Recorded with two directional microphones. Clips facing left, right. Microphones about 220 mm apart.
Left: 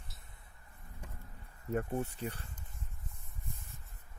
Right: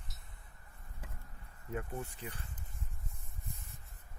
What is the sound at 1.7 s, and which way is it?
Speech, 45° left (ahead or behind).